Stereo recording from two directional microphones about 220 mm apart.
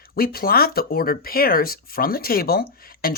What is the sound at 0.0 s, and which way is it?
Speech, 45° left (ahead or behind).